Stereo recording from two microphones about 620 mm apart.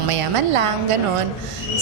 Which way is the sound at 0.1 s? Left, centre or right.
Right.